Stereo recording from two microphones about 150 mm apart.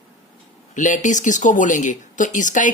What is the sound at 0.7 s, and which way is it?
Speech, 55° left (ahead or behind).